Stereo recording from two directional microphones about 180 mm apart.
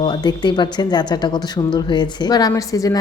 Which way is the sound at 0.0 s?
25° left (ahead or behind).